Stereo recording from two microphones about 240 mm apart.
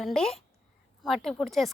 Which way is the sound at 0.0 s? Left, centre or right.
Centre.